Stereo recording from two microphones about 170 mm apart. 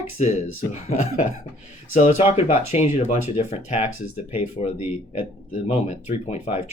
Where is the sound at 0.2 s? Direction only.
45° left (ahead or behind).